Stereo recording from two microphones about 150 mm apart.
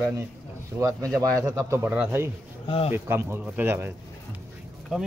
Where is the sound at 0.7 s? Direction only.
15° right (ahead or behind).